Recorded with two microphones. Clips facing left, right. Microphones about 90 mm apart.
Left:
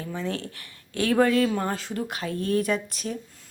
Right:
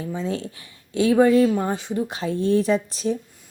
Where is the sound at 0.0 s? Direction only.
20° right (ahead or behind).